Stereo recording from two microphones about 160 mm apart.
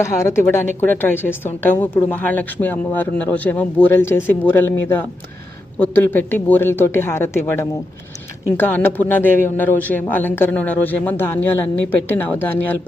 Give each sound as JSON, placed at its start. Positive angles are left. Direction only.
{"t": 0.0, "sound": "speech", "side_deg": 15}